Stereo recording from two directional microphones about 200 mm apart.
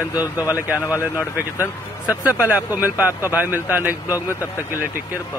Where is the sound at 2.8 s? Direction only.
10° right (ahead or behind).